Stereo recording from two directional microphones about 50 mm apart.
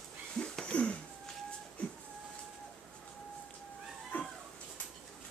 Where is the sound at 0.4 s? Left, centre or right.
Centre.